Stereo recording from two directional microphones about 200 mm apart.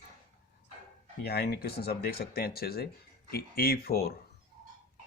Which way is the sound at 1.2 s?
50° left (ahead or behind).